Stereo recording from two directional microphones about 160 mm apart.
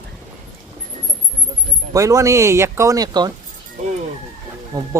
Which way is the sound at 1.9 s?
20° right (ahead or behind).